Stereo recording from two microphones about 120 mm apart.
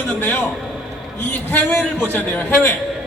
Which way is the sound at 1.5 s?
15° left (ahead or behind).